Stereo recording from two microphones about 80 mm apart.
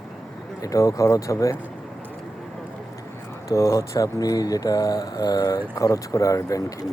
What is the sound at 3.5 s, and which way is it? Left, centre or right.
Speech, left.